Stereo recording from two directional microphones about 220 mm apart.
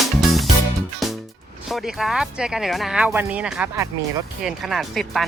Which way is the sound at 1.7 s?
Centre (ahead or behind).